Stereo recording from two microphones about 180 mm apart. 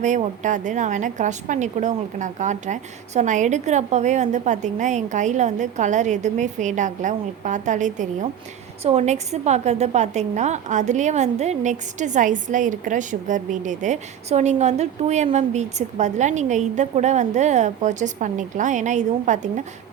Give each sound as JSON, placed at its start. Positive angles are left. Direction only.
{"t": 0.0, "sound": "a woman's voice", "side_deg": -45}